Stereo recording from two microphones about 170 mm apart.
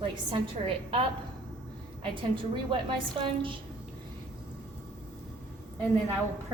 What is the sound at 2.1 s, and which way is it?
A woman's voice, 30° right (ahead or behind).